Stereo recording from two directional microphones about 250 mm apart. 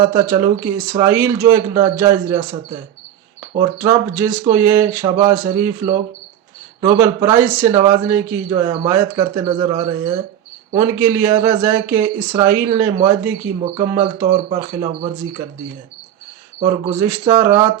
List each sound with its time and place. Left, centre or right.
0.0 s speech: centre
3.8 s speech: centre
16.6 s speech: centre